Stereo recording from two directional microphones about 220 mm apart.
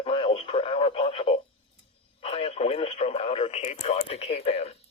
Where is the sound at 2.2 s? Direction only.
25° left (ahead or behind).